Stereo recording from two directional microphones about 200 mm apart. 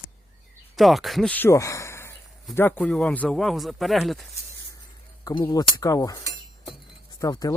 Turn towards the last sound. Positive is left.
turn(degrees=20)  # may be behind; listen again after turning